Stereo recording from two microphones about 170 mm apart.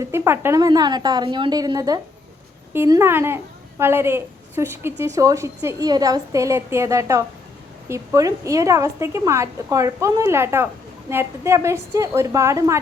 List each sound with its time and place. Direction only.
0.0 s a woman's voice: 15° right (ahead or behind)